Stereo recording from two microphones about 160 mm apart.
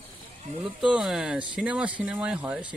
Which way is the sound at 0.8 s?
5° right (ahead or behind).